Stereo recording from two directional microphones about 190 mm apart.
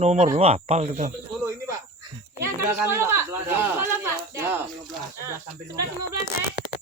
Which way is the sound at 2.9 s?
15° right (ahead or behind).